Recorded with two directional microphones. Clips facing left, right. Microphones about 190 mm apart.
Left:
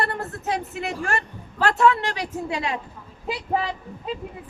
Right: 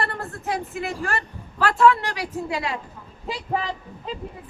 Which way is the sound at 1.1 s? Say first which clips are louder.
Left 1 dB; 25° left (ahead or behind).